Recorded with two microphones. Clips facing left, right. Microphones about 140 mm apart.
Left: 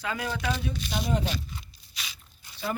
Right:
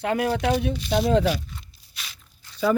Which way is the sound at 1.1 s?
90° right.